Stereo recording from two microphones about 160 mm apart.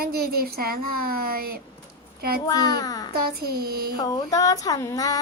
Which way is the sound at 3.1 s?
70° right (ahead or behind).